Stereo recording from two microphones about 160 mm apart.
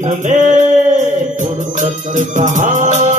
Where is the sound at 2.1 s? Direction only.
50° right (ahead or behind).